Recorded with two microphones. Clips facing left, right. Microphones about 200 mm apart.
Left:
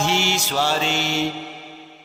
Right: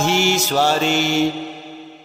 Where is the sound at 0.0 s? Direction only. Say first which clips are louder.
Right 5 dB; 45° right (ahead or behind).